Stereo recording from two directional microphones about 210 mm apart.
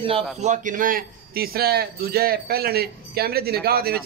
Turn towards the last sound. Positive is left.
turn(degrees=-45)  # may be behind; listen again after turning